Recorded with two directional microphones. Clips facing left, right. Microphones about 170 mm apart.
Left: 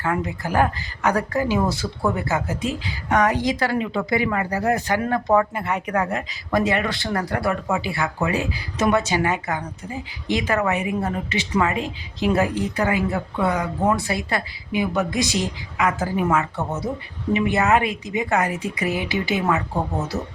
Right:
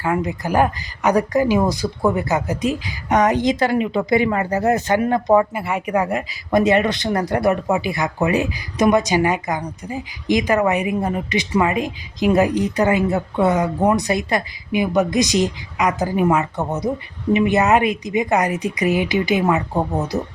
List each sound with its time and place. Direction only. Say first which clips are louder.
0.0 s speech: right 3 dB; 15° right (ahead or behind)